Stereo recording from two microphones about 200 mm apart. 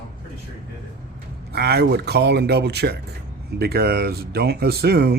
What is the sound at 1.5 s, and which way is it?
Speech, 50° right (ahead or behind).